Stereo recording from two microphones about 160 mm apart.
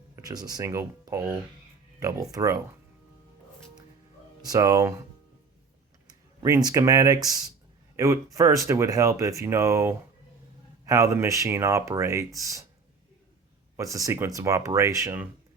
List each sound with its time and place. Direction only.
0.2 s speech: 25° right (ahead or behind)
4.4 s speech: 20° right (ahead or behind)
6.4 s speech: 20° right (ahead or behind)
13.7 s speech: 20° right (ahead or behind)